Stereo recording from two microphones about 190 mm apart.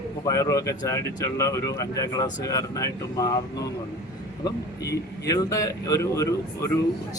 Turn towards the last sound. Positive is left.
turn(degrees=15)  # may be behind; listen again after turning